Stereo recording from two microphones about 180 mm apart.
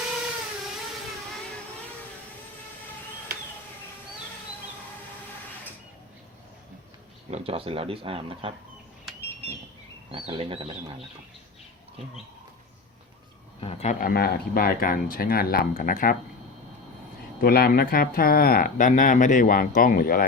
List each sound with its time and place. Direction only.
7.3 s speech: 35° right (ahead or behind)
10.1 s speech: 30° right (ahead or behind)
13.6 s speech: 35° left (ahead or behind)
14.0 s speech: 60° left (ahead or behind)
17.4 s speech: 60° left (ahead or behind)